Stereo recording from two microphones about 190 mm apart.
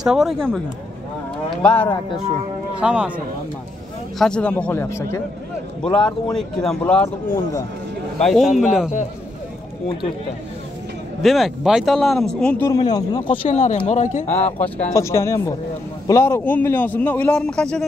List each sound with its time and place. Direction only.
0.0 s speech: 5° right (ahead or behind)
1.6 s a man's voice: 5° left (ahead or behind)
2.8 s speech: 5° right (ahead or behind)
4.2 s a man's voice: 5° left (ahead or behind)
11.2 s speech: centre (ahead or behind)
12.7 s speech: 20° left (ahead or behind)
13.5 s speech: 40° left (ahead or behind)
14.6 s a man's voice: 15° left (ahead or behind)